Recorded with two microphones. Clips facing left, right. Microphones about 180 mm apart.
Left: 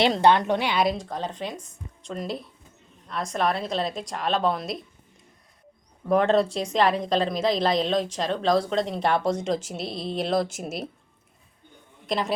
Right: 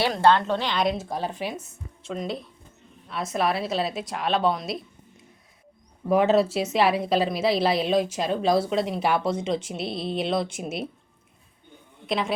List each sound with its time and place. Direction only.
0.0 s speech: 20° left (ahead or behind)
0.9 s a woman's voice: 10° right (ahead or behind)
6.1 s a woman's voice: 5° right (ahead or behind)
12.0 s a woman's voice: centre (ahead or behind)